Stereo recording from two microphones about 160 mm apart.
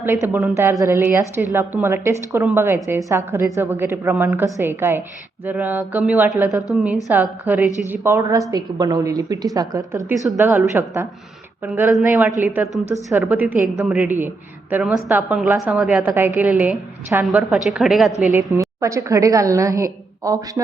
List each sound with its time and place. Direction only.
0.0 s a woman's voice: 15° right (ahead or behind)
18.1 s a woman's voice: 50° left (ahead or behind)
18.3 s a woman's voice: 20° right (ahead or behind)